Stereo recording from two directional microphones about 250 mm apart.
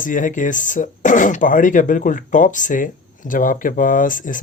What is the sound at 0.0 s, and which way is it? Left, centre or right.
Speech, left.